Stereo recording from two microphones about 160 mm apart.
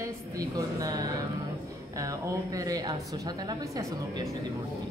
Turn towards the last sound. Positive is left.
turn(degrees=-25)  # may be behind; listen again after turning